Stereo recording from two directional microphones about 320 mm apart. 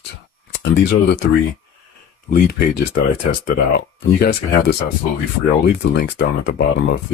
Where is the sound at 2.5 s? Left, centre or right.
Left.